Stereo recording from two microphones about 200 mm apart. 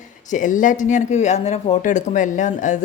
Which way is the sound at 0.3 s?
40° left (ahead or behind).